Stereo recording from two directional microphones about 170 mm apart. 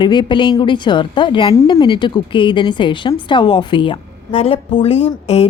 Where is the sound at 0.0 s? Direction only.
25° left (ahead or behind).